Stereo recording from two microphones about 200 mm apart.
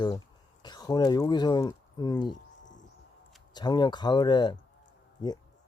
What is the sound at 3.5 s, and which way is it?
Speech, 20° left (ahead or behind).